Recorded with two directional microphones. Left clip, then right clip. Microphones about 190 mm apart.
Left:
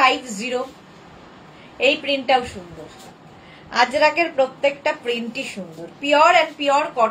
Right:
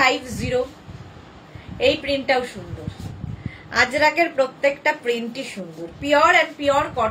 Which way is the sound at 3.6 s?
20° right (ahead or behind).